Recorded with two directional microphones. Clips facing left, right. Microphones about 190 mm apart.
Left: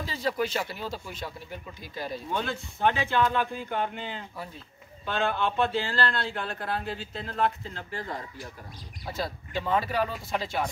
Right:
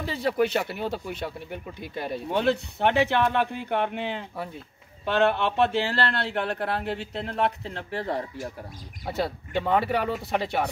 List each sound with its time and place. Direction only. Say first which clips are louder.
0.0 s speech: right 5 dB; 60° right (ahead or behind)